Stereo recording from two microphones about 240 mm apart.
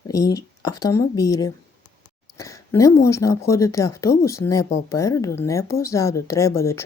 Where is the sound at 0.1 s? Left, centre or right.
Centre.